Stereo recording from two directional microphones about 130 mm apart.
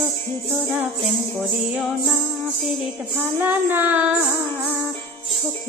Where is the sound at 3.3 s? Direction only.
15° right (ahead or behind).